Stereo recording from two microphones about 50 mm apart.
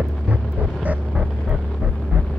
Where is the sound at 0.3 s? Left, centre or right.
Right.